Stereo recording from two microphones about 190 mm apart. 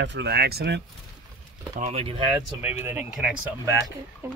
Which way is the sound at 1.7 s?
35° right (ahead or behind).